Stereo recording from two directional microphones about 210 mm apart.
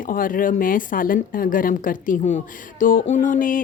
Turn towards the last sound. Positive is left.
turn(degrees=40)  # may be behind; listen again after turning